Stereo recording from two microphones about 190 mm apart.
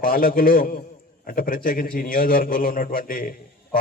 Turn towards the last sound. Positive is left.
turn(degrees=50)  # may be behind; listen again after turning